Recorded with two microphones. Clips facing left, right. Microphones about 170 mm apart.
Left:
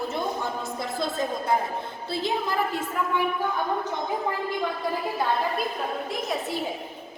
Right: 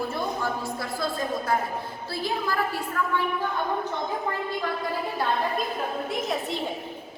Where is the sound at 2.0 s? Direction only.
20° left (ahead or behind).